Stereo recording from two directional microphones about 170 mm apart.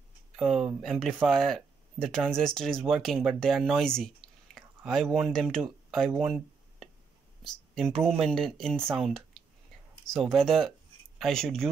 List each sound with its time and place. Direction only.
0.4 s speech: 5° right (ahead or behind)
5.6 s a sound: centre (ahead or behind)
7.4 s speech: centre (ahead or behind)